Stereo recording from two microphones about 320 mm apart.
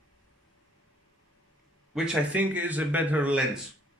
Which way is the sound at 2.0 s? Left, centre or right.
Centre.